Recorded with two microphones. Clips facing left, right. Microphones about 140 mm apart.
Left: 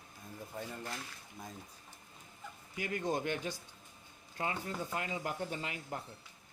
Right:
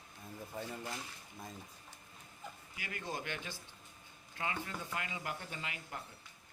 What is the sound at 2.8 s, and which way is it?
Speech, 45° left (ahead or behind).